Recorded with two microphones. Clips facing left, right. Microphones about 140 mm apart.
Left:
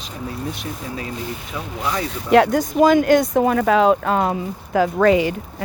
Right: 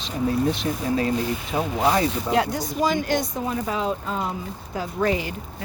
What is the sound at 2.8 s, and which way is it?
Speech, 60° left (ahead or behind).